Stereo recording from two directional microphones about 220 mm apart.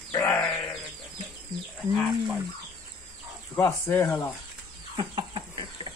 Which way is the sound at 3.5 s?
10° left (ahead or behind).